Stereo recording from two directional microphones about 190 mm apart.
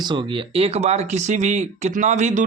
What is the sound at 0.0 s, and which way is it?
Speech, 25° right (ahead or behind).